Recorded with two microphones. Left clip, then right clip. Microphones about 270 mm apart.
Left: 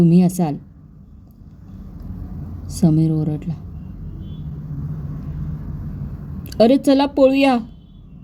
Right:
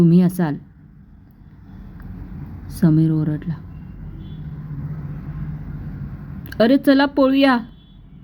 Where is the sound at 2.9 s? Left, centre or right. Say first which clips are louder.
Right 1 dB; right.